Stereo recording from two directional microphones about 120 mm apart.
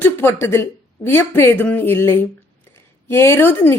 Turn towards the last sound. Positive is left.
turn(degrees=20)  # may be behind; listen again after turning